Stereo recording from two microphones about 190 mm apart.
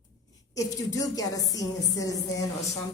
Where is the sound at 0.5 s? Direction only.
15° left (ahead or behind).